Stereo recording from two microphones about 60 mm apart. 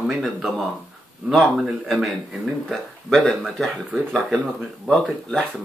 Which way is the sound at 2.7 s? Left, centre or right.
Centre.